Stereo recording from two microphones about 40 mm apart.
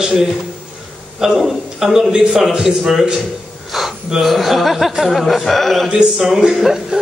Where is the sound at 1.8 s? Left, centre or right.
Centre.